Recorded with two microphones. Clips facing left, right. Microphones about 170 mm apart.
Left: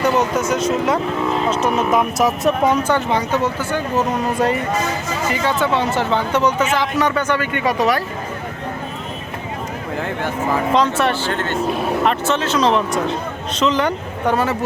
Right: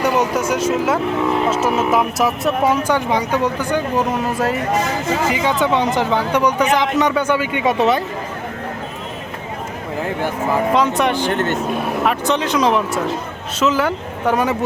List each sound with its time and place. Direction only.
0.0 s a man's voice: 10° right (ahead or behind)
2.8 s a man's voice: 10° right (ahead or behind)
5.3 s a man's voice: 15° right (ahead or behind)
7.8 s speech: 25° right (ahead or behind)
10.8 s a man's voice: 15° right (ahead or behind)